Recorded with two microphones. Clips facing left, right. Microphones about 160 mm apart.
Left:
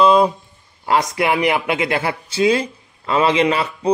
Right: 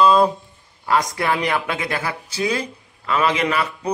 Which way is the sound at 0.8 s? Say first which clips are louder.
Left 3 dB; 20° left (ahead or behind).